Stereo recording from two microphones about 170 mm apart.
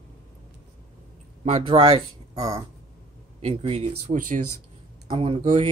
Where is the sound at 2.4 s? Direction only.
20° right (ahead or behind).